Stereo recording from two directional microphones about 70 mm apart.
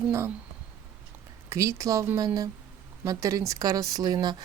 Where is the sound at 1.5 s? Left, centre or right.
Right.